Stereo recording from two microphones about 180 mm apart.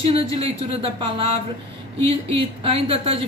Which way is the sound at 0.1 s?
30° right (ahead or behind).